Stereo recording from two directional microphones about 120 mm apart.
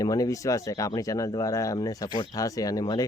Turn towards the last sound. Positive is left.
turn(degrees=30)  # may be behind; listen again after turning